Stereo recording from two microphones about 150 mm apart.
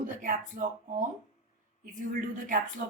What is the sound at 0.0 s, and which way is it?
A woman's voice, 60° right (ahead or behind).